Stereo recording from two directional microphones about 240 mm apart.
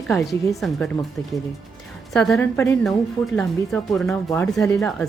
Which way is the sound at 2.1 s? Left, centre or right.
Centre.